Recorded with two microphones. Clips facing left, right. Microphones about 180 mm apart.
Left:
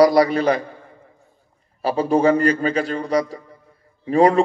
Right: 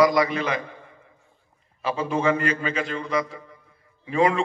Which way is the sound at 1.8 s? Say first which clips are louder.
Left 7 dB; 35° left (ahead or behind).